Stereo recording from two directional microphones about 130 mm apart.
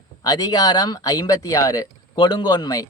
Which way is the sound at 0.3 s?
30° left (ahead or behind).